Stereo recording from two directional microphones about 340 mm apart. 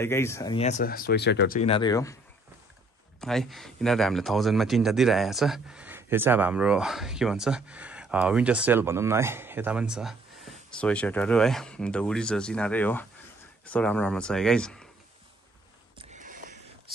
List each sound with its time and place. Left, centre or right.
0.0 s speech: centre; by 1.6 s left
1.6 s speech: centre
3.2 s speech: centre
16.0 s a sound: right